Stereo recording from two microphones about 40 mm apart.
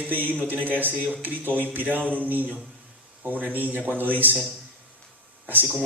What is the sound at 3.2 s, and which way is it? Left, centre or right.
A man's voice, right.